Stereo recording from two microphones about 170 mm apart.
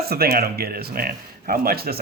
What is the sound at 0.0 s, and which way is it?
Speech, 65° right (ahead or behind).